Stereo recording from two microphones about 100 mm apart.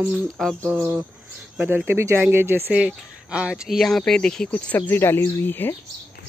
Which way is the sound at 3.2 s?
10° right (ahead or behind).